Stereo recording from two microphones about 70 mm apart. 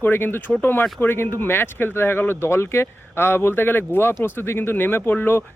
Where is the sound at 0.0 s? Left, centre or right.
Left.